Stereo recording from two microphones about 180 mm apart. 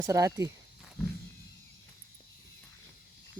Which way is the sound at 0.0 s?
20° right (ahead or behind).